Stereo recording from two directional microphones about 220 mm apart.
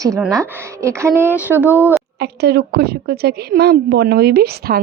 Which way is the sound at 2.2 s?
50° right (ahead or behind).